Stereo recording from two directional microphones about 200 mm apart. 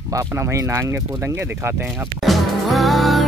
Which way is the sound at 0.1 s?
15° right (ahead or behind).